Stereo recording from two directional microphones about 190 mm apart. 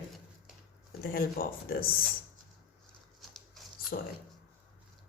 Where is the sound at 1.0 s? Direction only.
50° left (ahead or behind).